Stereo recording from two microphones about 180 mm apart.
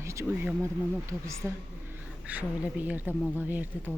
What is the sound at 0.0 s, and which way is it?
Speech, 15° right (ahead or behind).